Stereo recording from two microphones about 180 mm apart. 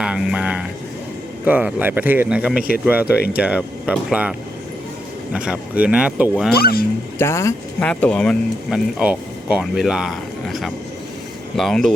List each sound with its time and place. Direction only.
0.0 s a sound: 5° right (ahead or behind)
1.5 s speech: 10° right (ahead or behind)
6.5 s speech: 60° left (ahead or behind)
7.2 s speech: 15° left (ahead or behind)
9.0 s speech: 5° right (ahead or behind)